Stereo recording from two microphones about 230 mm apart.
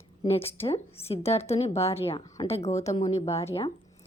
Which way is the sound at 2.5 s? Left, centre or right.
Left.